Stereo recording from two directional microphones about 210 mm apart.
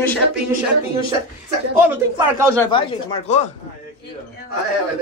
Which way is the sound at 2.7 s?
30° left (ahead or behind).